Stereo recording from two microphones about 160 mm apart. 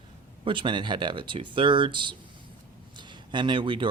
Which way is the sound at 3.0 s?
30° right (ahead or behind).